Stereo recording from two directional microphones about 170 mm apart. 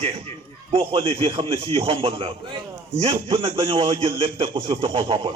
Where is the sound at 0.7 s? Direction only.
30° right (ahead or behind).